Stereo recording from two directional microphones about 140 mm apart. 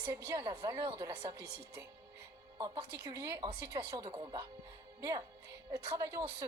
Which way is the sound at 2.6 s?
25° right (ahead or behind).